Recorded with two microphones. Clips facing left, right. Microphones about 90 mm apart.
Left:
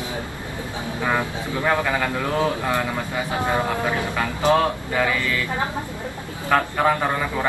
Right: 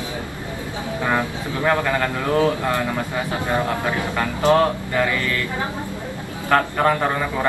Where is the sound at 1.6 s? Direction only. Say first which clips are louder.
Right 2 dB; 5° left (ahead or behind).